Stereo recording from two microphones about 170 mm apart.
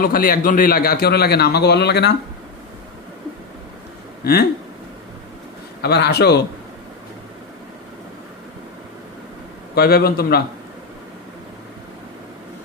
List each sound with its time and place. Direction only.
0.0 s a man's voice: 60° left (ahead or behind); by 2.1 s 75° left (ahead or behind)
4.2 s speech: 65° left (ahead or behind)
5.8 s a man's voice: 75° left (ahead or behind)
9.7 s a man's voice: 70° left (ahead or behind)